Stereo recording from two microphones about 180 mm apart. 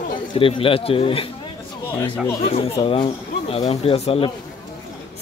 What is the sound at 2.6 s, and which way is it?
Speech, 30° left (ahead or behind).